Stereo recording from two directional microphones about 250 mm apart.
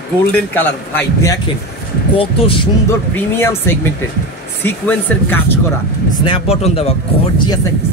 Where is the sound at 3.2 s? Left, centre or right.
Centre.